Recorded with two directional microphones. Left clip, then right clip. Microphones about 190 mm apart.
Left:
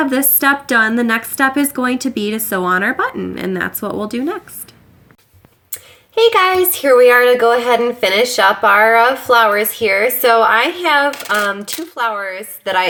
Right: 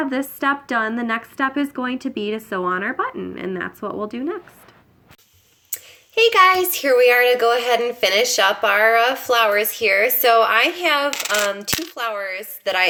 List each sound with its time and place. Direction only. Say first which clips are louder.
0.0 s a woman's voice: left 7 dB; 30° left (ahead or behind)
5.7 s a woman's voice: left 3 dB; 15° left (ahead or behind)